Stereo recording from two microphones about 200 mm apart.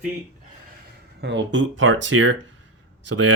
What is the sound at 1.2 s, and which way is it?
Speech, 65° right (ahead or behind).